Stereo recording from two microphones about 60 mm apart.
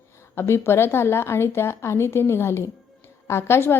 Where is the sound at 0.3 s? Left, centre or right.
Left.